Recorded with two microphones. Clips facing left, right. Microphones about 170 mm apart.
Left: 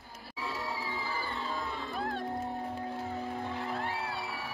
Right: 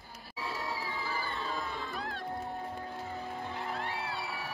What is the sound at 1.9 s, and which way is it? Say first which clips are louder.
Music: left 4 dB; 50° left (ahead or behind).